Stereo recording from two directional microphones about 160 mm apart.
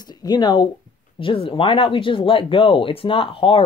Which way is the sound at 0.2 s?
25° left (ahead or behind).